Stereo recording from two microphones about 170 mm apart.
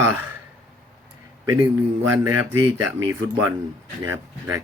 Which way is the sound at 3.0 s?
10° right (ahead or behind).